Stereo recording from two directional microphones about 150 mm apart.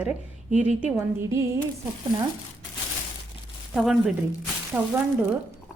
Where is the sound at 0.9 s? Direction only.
20° right (ahead or behind).